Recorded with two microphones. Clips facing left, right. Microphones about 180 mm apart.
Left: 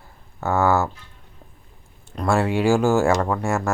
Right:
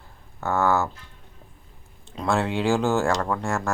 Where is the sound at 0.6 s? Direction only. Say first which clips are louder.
Left 3 dB; 5° left (ahead or behind).